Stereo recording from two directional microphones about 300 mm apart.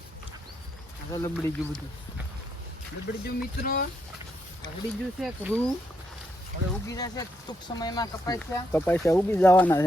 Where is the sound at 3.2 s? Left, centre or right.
Left.